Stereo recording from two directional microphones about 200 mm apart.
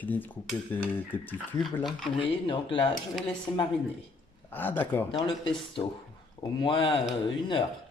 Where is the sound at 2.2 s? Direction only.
25° left (ahead or behind); by 5.1 s 10° left (ahead or behind).